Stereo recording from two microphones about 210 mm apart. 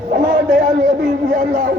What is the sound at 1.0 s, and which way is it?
Speech, 40° right (ahead or behind).